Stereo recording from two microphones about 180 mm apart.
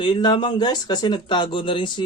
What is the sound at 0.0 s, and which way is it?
Speech, 25° left (ahead or behind).